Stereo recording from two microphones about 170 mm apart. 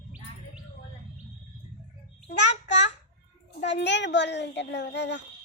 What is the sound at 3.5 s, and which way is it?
A child's voice, 90° left.